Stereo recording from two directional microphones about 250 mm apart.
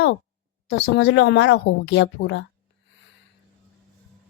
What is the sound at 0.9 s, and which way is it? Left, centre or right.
A woman's voice, left.